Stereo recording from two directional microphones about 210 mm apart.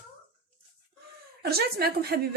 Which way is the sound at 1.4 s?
45° right (ahead or behind).